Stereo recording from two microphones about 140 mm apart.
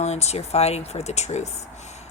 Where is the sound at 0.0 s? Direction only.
50° left (ahead or behind).